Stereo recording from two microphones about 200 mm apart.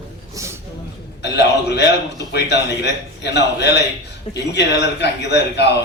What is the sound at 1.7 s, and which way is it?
A man's voice, 60° left (ahead or behind).